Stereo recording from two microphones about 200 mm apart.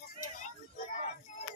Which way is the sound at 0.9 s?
35° left (ahead or behind).